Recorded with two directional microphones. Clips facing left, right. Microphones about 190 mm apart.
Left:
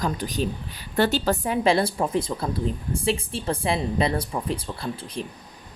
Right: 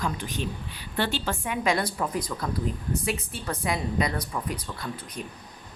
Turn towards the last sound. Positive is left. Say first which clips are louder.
# left 4 dB
turn(degrees=30)  # may be behind; listen again after turning